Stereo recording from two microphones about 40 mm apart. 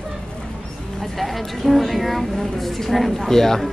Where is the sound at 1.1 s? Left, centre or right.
Centre.